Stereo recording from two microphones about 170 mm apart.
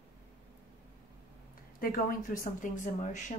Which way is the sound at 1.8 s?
55° left (ahead or behind).